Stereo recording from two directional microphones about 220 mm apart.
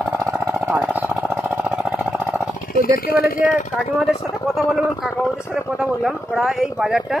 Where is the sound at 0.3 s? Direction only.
10° right (ahead or behind).